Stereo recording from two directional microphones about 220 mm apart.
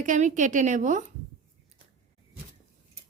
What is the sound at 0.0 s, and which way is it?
A woman's voice, 35° right (ahead or behind).